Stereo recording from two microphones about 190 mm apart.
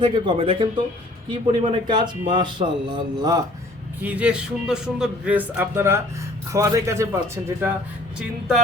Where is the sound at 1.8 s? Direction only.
25° right (ahead or behind).